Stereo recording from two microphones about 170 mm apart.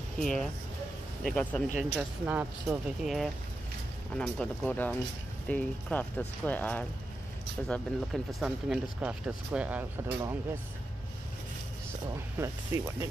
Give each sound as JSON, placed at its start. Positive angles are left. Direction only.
{"t": 0.2, "sound": "speech", "side_deg": 0}
{"t": 1.8, "sound": "speech", "side_deg": -5}
{"t": 12.4, "sound": "speech", "side_deg": -15}